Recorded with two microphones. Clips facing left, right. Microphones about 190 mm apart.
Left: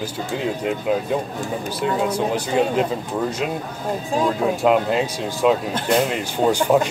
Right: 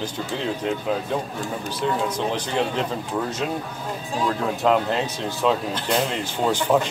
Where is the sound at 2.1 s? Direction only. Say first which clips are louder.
Left 4 dB; 10° left (ahead or behind).